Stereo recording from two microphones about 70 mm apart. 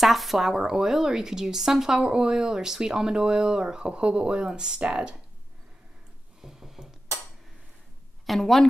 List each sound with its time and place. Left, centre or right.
0.0 s speech: centre
6.4 s a sound: centre
8.3 s a woman's voice: centre